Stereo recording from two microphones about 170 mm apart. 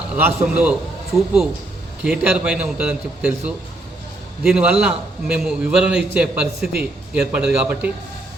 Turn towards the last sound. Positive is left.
turn(degrees=-10)  # may be behind; listen again after turning